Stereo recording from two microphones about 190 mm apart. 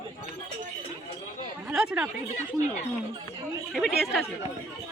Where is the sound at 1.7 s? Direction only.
Centre (ahead or behind).